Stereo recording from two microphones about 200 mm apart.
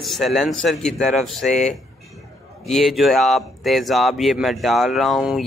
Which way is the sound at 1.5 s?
35° left (ahead or behind).